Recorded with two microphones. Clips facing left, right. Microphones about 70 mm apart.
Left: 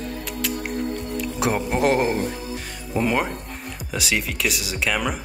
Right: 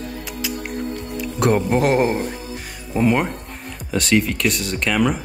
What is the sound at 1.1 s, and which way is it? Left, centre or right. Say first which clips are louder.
Music: right 6 dB; centre.